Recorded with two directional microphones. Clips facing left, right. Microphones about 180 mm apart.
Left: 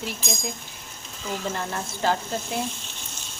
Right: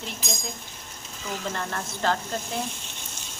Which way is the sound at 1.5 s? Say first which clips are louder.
Left 1 dB; 5° left (ahead or behind).